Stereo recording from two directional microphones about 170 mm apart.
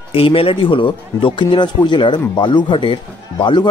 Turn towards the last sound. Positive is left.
turn(degrees=30)  # may be behind; listen again after turning